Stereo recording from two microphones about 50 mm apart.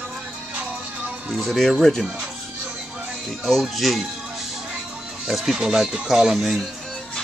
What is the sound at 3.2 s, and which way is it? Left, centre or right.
Speech, centre.